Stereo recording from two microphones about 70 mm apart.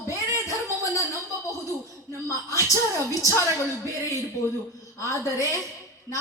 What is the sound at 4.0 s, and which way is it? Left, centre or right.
A woman's voice, left.